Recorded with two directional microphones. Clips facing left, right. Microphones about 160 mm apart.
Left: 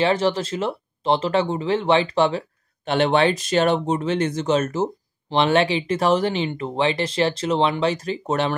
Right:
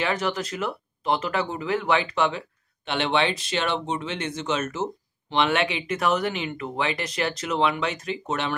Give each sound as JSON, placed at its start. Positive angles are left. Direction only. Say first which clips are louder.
{"t": 0.0, "sound": "speech", "louder": "left 6 dB", "side_deg": 30}